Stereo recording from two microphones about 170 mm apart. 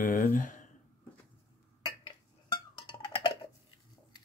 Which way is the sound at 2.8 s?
30° left (ahead or behind).